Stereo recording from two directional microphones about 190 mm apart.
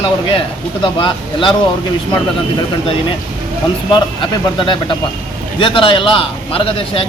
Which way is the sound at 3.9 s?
25° left (ahead or behind).